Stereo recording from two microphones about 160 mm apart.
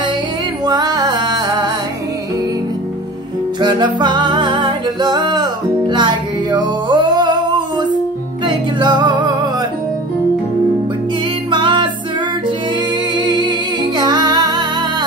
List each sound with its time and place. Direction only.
0.7 s music: 25° right (ahead or behind)
3.6 s music: 25° right (ahead or behind)
11.5 s music: 30° right (ahead or behind)
13.1 s music: 30° right (ahead or behind)